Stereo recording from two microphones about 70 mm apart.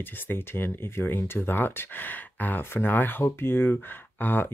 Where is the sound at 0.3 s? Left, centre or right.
Left.